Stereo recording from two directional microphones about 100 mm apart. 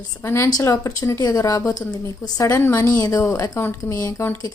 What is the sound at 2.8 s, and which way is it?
A woman's voice, 35° left (ahead or behind).